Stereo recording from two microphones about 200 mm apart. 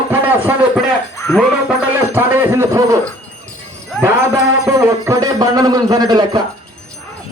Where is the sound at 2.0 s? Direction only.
10° right (ahead or behind).